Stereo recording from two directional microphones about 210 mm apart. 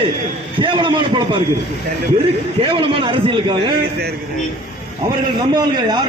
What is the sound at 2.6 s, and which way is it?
A man's voice, 25° right (ahead or behind).